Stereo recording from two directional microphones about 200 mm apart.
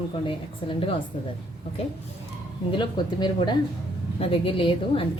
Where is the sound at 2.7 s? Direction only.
25° left (ahead or behind).